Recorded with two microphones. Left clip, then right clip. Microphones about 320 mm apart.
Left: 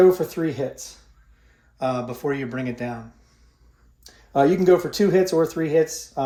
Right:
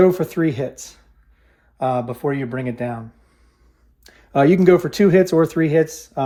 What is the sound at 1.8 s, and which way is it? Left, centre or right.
Speech, centre.